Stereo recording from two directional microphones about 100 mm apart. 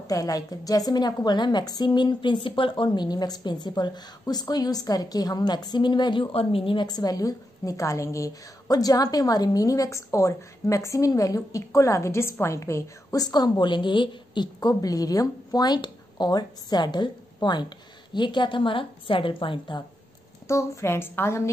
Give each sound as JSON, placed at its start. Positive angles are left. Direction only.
{"t": 0.0, "sound": "a woman's voice", "side_deg": 35}
{"t": 6.3, "sound": "a woman's voice", "side_deg": 65}
{"t": 6.9, "sound": "a woman's voice", "side_deg": 40}
{"t": 20.4, "sound": "a woman's voice", "side_deg": 30}